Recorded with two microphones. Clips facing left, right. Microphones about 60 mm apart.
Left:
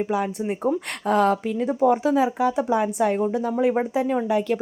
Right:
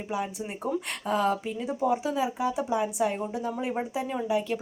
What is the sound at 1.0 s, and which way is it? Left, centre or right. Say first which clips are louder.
Speech: left 7 dB; left.